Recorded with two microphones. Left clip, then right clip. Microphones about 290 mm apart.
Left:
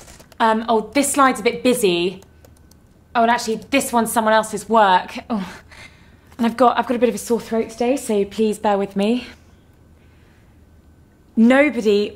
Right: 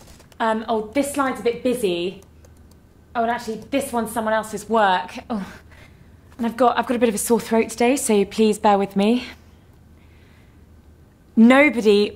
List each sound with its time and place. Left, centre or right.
0.4 s a woman's voice: centre
7.0 s a woman's voice: right
7.2 s speech: right
11.3 s a woman's voice: right